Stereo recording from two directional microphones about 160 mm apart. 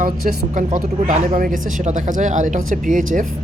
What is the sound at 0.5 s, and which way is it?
Speech, 50° right (ahead or behind).